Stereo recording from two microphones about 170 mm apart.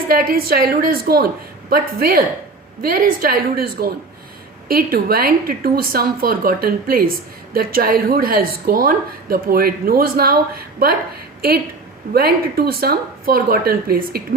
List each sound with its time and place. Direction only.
0.1 s speech: 60° right (ahead or behind)
12.1 s speech: 65° right (ahead or behind)